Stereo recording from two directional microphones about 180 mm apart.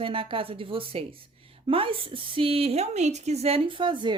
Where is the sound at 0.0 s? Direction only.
30° right (ahead or behind).